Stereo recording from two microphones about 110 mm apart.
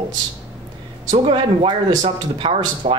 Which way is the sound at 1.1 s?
55° right (ahead or behind).